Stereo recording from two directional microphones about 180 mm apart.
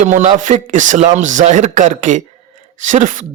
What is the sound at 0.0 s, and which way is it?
A man's voice, 45° right (ahead or behind).